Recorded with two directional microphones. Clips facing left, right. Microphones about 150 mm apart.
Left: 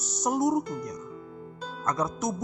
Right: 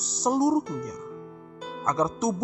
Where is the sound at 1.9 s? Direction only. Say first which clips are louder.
Right 3 dB; 25° right (ahead or behind).